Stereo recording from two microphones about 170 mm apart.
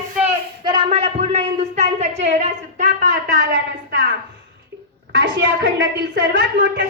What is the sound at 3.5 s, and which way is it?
Speech, 80° right.